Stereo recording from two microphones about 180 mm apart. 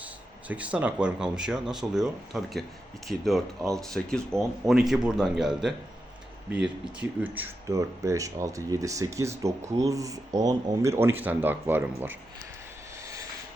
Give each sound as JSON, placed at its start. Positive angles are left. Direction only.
{"t": 0.4, "sound": "speech", "side_deg": -10}